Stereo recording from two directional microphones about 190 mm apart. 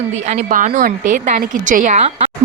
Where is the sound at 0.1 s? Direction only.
40° right (ahead or behind).